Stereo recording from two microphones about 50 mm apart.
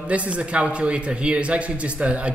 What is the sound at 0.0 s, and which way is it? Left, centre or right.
A man's voice, right.